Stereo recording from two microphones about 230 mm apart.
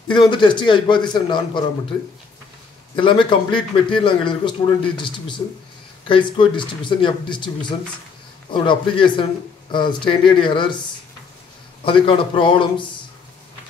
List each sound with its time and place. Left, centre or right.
0.1 s a man's voice: left
3.0 s a man's voice: left
11.8 s a man's voice: left